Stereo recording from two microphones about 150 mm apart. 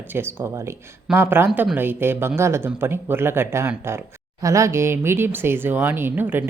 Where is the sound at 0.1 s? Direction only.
15° right (ahead or behind).